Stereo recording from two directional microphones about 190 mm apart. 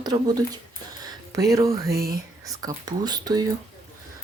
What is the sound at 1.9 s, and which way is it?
Speech, 55° right (ahead or behind).